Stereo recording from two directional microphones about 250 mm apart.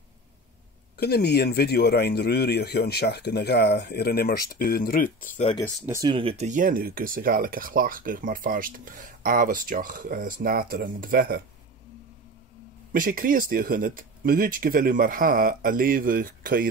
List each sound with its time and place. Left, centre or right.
0.9 s speech: left
5.8 s speech: centre; by 11.4 s right
12.9 s speech: right